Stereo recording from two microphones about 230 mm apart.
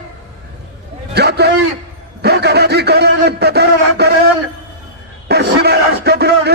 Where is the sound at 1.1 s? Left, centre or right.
Right.